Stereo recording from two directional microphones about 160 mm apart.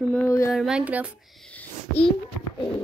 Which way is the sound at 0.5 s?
5° right (ahead or behind).